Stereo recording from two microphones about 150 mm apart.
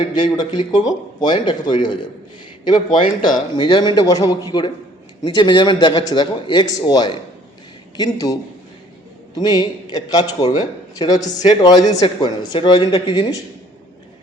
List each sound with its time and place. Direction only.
0.0 s a man's voice: 30° left (ahead or behind)